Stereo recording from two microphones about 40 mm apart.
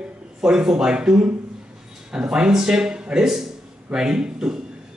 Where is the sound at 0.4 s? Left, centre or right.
Centre.